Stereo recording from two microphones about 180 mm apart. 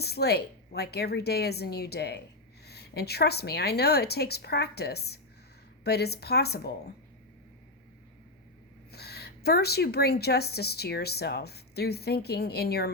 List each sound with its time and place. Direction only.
0.0 s a woman's voice: 65° left (ahead or behind)
8.9 s a woman's voice: 65° left (ahead or behind)